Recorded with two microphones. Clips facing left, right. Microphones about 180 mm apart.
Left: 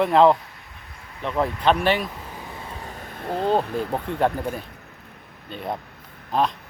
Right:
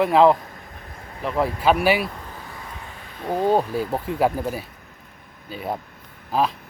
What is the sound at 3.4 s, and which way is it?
Speech, 10° right (ahead or behind).